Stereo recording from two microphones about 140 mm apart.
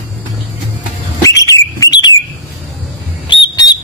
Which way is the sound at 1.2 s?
25° left (ahead or behind).